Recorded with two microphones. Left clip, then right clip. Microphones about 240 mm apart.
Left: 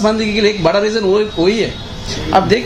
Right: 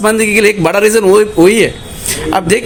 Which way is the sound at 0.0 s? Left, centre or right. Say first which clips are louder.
Right 5 dB; right.